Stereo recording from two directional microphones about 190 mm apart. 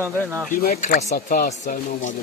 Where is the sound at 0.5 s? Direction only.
45° left (ahead or behind).